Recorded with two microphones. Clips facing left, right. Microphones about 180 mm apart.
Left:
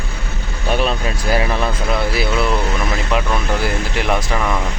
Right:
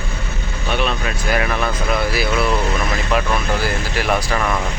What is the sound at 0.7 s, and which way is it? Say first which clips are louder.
Vehicle: left 2 dB; 35° left (ahead or behind).